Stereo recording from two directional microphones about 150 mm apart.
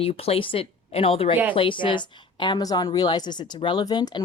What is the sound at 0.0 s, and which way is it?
A woman's voice, 40° left (ahead or behind).